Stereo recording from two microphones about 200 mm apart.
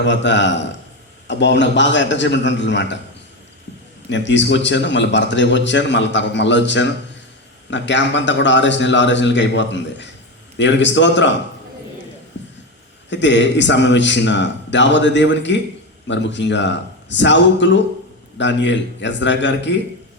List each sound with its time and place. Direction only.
0.0 s a man's voice: 65° left (ahead or behind)
4.1 s a man's voice: 65° left (ahead or behind)
12.4 s a sound: 65° left (ahead or behind)
13.1 s a man's voice: 65° left (ahead or behind)